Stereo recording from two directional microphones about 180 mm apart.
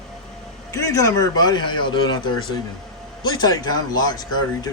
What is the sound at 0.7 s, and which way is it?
A man's voice, 20° left (ahead or behind).